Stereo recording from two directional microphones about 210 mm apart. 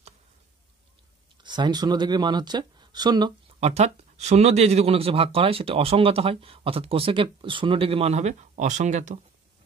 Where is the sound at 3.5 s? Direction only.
30° right (ahead or behind).